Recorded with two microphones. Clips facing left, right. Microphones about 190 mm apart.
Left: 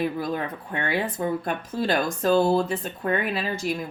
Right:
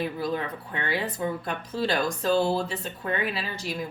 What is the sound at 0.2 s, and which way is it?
Speech, 50° left (ahead or behind).